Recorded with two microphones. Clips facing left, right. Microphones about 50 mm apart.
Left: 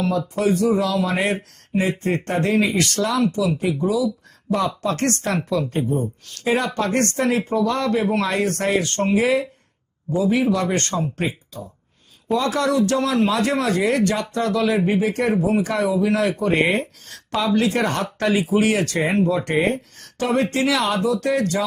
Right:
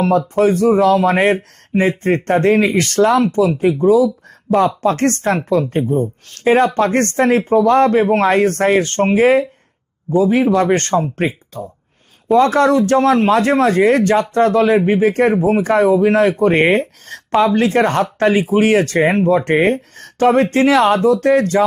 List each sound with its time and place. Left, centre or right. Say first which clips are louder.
0.0 s a man's voice: right 7 dB; right